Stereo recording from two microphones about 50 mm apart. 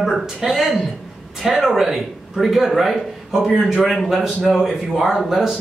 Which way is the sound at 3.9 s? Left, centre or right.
Centre.